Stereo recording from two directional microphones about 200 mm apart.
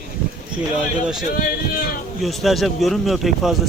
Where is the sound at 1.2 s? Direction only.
45° left (ahead or behind).